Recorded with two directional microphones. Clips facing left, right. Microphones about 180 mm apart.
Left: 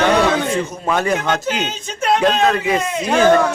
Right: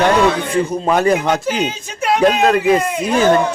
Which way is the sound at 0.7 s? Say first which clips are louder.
Right 4 dB; 35° right (ahead or behind).